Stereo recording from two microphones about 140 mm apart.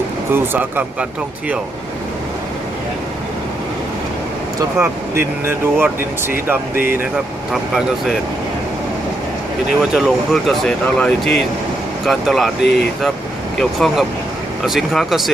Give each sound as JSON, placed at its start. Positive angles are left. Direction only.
{"t": 0.3, "sound": "speech", "side_deg": -15}
{"t": 4.8, "sound": "speech", "side_deg": -15}
{"t": 9.9, "sound": "speech", "side_deg": 0}